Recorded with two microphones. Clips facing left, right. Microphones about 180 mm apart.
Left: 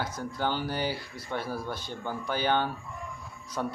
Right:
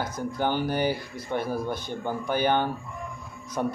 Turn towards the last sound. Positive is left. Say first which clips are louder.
# right 4 dB
turn(degrees=-15)  # may be behind; listen again after turning